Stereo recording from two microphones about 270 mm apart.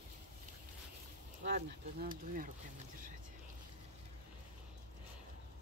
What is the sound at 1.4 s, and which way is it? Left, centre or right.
Speech, right.